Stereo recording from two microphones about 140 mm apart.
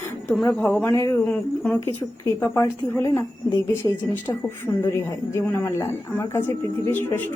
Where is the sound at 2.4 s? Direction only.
15° left (ahead or behind).